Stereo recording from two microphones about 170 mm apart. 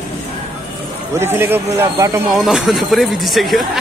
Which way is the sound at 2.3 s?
Centre (ahead or behind).